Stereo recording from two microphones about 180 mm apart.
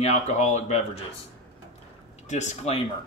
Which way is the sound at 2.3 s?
40° left (ahead or behind).